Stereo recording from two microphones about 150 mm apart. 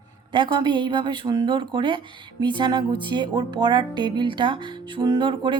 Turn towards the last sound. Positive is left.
turn(degrees=-30)  # may be behind; listen again after turning